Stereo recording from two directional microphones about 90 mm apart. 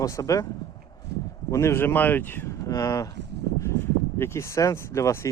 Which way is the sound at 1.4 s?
35° left (ahead or behind).